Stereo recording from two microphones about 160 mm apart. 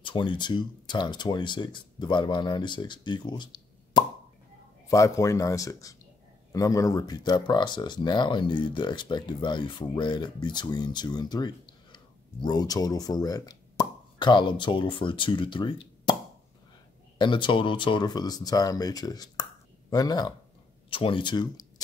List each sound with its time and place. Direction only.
0.0 s speech: 30° left (ahead or behind)
17.2 s speech: 30° left (ahead or behind)